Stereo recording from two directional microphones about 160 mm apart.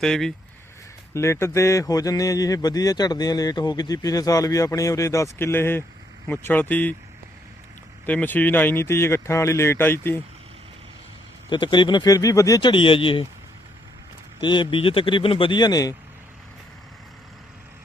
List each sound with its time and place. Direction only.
0.0 s speech: 5° left (ahead or behind)
1.1 s speech: 15° left (ahead or behind)
8.0 s speech: 10° left (ahead or behind)
11.4 s speech: 30° left (ahead or behind)
14.4 s speech: 30° left (ahead or behind)